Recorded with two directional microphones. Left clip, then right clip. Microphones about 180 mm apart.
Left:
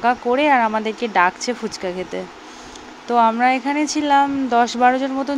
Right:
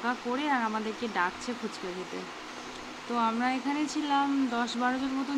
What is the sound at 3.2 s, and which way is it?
Speech, 40° left (ahead or behind).